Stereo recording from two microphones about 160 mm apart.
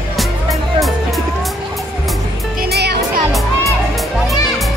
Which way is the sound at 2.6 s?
90° right.